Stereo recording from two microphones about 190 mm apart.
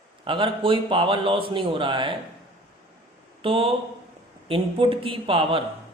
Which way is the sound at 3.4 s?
25° right (ahead or behind).